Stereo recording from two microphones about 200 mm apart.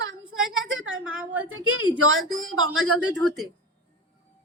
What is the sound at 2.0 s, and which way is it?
Speech, 75° right (ahead or behind).